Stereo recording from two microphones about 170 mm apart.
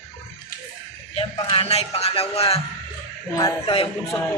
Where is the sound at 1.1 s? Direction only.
35° left (ahead or behind).